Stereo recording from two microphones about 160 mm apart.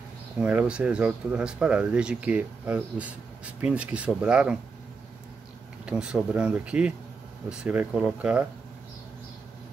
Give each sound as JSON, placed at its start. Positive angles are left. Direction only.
{"t": 0.4, "sound": "speech", "side_deg": -5}
{"t": 5.9, "sound": "speech", "side_deg": -5}